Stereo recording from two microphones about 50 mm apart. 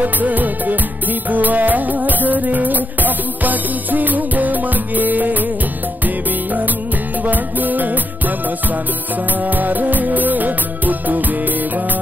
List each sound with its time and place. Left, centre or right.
0.0 s music: right
9.4 s music: right